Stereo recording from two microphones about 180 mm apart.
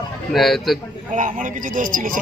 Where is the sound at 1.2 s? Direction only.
45° right (ahead or behind).